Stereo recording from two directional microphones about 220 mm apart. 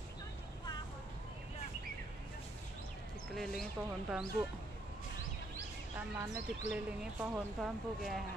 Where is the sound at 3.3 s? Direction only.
Centre (ahead or behind).